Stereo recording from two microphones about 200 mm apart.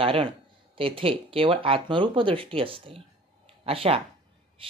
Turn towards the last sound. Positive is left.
turn(degrees=-30)  # may be behind; listen again after turning